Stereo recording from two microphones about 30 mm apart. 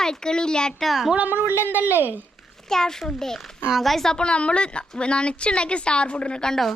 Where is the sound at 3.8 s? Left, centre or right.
Centre.